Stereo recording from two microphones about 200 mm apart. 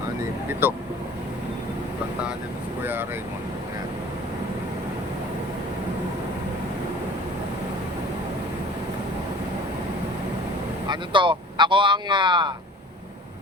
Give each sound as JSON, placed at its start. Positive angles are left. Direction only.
{"t": 0.6, "sound": "speech", "side_deg": -10}
{"t": 2.8, "sound": "speech", "side_deg": -10}
{"t": 10.8, "sound": "speech", "side_deg": -25}